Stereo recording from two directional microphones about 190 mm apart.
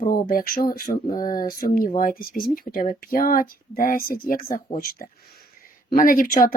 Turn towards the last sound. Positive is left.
turn(degrees=45)  # may be behind; listen again after turning